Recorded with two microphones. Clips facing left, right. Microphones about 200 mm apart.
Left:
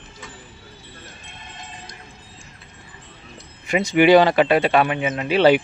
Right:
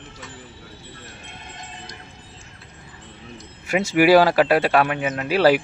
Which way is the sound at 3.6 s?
5° right (ahead or behind).